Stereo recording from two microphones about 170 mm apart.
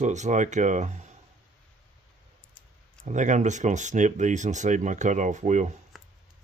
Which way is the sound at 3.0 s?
45° right (ahead or behind).